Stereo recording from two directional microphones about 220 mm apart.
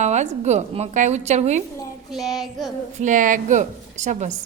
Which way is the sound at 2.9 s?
35° right (ahead or behind).